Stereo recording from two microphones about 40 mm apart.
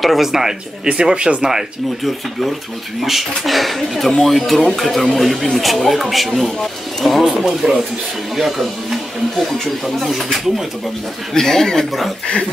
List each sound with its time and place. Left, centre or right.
0.0 s speech: centre
0.8 s speech: right
3.0 s speech: centre
11.3 s speech: centre